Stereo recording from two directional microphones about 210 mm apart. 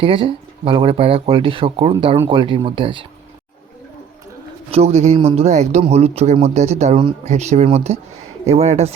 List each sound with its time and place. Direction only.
0.0 s speech: 25° right (ahead or behind)
4.7 s speech: 30° right (ahead or behind)